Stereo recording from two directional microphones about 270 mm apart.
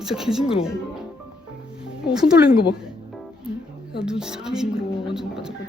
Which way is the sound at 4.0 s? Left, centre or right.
Centre.